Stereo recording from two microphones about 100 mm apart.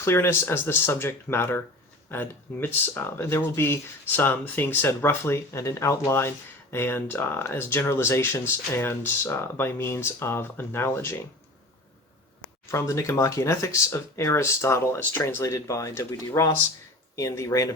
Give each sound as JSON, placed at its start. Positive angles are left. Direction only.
{"t": 0.0, "sound": "speech", "side_deg": 25}
{"t": 12.7, "sound": "speech", "side_deg": 30}